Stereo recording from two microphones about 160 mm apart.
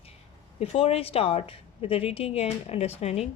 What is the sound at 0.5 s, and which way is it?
A woman's voice, 40° left (ahead or behind).